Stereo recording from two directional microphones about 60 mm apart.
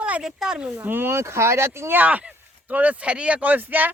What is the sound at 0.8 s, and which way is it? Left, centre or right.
Speech, right.